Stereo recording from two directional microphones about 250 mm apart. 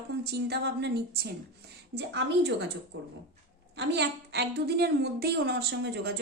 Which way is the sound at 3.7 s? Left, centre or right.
Right.